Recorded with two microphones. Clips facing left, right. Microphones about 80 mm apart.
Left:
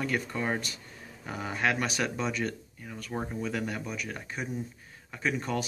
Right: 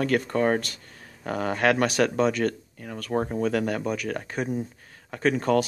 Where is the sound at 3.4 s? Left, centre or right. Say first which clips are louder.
Right 8 dB; right.